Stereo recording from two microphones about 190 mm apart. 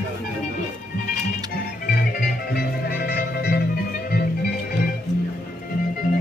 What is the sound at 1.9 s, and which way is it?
Music, 55° left (ahead or behind).